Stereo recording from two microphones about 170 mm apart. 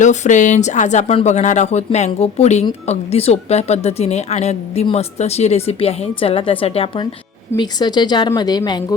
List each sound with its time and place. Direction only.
0.0 s a woman's voice: 45° left (ahead or behind); by 9.0 s 25° left (ahead or behind)